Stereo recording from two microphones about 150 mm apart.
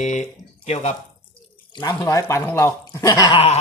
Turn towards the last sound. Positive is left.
turn(degrees=45)  # may be behind; listen again after turning